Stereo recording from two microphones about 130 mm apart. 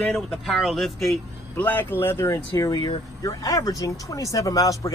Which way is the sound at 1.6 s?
15° left (ahead or behind).